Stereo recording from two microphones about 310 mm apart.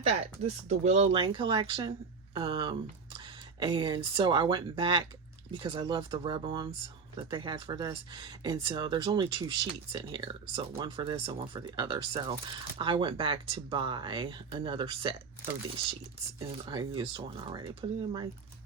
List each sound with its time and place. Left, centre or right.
0.1 s speech: right
16.6 s speech: centre